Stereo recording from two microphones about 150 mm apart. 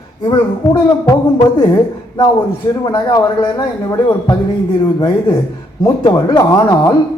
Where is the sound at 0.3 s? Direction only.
30° left (ahead or behind).